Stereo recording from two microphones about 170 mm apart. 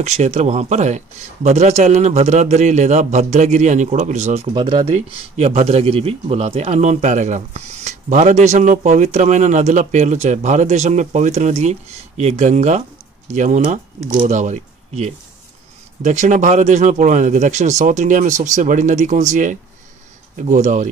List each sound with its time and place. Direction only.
0.0 s speech: 40° right (ahead or behind)
4.6 s speech: 25° right (ahead or behind)
4.9 s speech: 40° right (ahead or behind)